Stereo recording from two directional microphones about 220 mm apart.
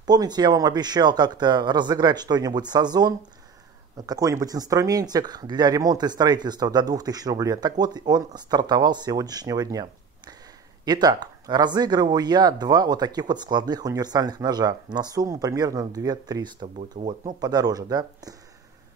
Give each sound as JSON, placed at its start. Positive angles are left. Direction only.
{"t": 0.0, "sound": "speech", "side_deg": -15}
{"t": 17.0, "sound": "speech", "side_deg": -35}
{"t": 17.3, "sound": "speech", "side_deg": -20}